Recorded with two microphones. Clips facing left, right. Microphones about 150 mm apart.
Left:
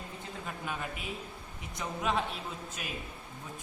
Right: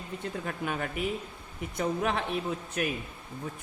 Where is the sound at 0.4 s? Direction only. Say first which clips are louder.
Right 3 dB; 60° right (ahead or behind).